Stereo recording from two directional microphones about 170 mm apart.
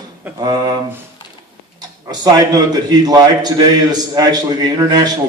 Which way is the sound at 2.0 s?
25° right (ahead or behind).